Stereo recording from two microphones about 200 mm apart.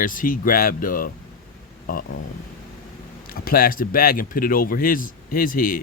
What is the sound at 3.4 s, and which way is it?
Speech, 45° left (ahead or behind).